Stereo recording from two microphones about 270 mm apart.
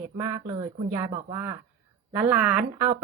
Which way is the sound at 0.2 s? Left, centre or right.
Centre.